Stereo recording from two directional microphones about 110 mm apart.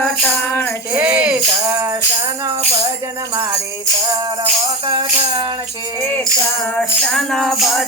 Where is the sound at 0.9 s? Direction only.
10° right (ahead or behind).